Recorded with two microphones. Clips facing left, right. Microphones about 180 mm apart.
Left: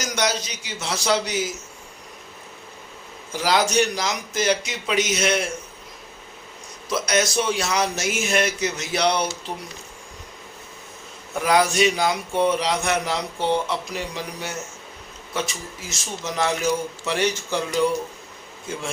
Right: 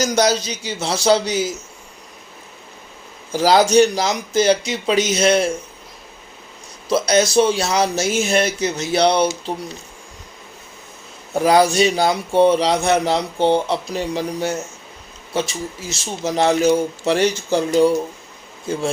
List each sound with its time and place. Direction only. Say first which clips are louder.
0.0 s a man's voice: right 8 dB; 35° right (ahead or behind)
3.3 s a man's voice: right 7 dB; 30° right (ahead or behind)
6.8 s a man's voice: right 6 dB; 30° right (ahead or behind)
11.3 s a man's voice: right 5 dB; 30° right (ahead or behind)